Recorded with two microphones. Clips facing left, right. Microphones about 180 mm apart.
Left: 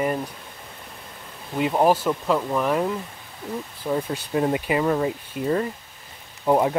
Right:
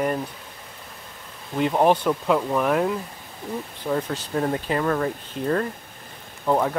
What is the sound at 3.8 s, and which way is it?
Speech, 10° left (ahead or behind).